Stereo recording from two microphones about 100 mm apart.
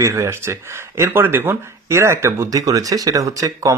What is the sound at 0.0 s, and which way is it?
Speech, 30° right (ahead or behind).